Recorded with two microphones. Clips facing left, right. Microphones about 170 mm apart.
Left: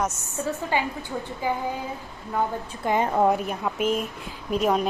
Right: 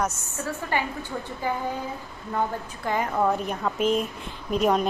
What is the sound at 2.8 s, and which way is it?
Speech, 25° left (ahead or behind).